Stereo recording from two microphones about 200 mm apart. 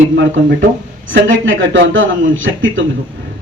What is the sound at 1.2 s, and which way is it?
A man's voice, 70° right (ahead or behind).